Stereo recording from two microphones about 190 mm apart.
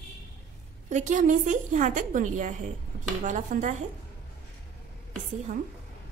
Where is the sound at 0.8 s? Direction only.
40° right (ahead or behind).